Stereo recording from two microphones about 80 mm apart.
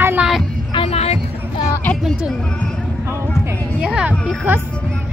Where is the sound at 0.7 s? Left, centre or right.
Left.